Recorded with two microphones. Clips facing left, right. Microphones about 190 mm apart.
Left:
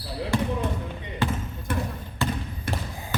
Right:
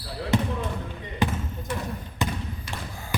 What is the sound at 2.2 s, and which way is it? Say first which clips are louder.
Trickle: left 1 dB; 15° right (ahead or behind).